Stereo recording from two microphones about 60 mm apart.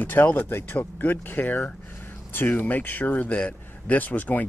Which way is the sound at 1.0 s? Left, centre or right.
Left.